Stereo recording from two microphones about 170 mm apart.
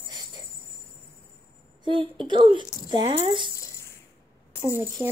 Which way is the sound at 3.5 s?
15° left (ahead or behind).